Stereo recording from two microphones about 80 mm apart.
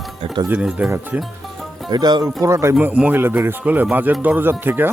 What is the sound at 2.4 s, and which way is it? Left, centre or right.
Music, right.